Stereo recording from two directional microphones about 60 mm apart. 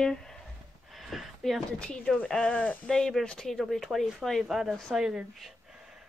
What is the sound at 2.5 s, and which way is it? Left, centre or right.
Speech, left.